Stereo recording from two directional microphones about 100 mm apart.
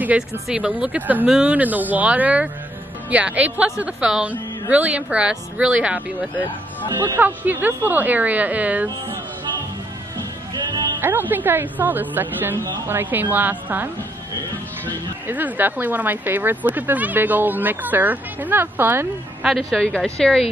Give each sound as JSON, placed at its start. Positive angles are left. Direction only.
{"t": 0.5, "sound": "speech", "side_deg": -10}
{"t": 7.2, "sound": "speech", "side_deg": -20}
{"t": 10.1, "sound": "music", "side_deg": -40}
{"t": 11.0, "sound": "speech", "side_deg": -20}
{"t": 15.2, "sound": "speech", "side_deg": -15}
{"t": 19.4, "sound": "a woman's voice", "side_deg": 0}